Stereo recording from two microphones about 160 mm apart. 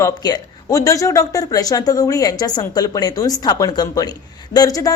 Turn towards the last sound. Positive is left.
turn(degrees=20)  # may be behind; listen again after turning